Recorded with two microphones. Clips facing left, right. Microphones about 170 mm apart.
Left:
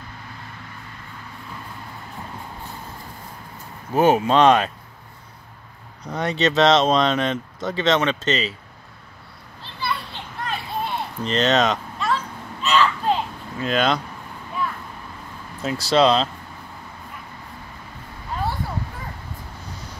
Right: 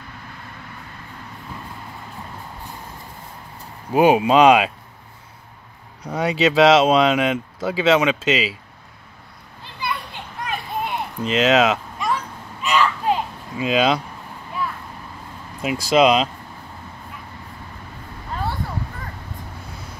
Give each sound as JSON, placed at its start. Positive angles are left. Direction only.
{"t": 3.9, "sound": "speech", "side_deg": -15}
{"t": 6.0, "sound": "speech", "side_deg": -10}
{"t": 10.4, "sound": "a sound", "side_deg": -10}
{"t": 15.6, "sound": "speech", "side_deg": -10}